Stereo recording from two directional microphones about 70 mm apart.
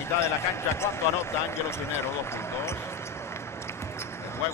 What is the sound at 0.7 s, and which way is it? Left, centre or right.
Speech, left.